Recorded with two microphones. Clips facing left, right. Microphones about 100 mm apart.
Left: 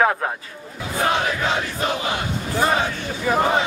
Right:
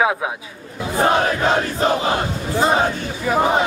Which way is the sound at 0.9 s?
35° right (ahead or behind).